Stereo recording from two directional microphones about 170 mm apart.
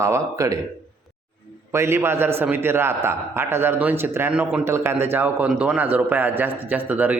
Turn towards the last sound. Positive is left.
turn(degrees=-10)  # may be behind; listen again after turning